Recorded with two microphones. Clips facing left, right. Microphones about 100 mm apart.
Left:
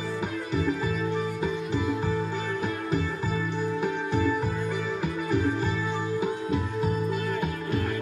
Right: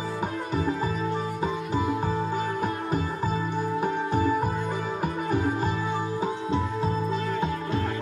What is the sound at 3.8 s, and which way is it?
Music, 40° right (ahead or behind).